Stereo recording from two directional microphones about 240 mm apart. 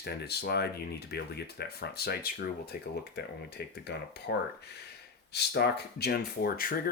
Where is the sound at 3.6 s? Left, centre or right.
Left.